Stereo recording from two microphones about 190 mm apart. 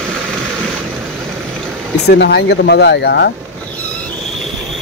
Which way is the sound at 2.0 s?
60° left (ahead or behind).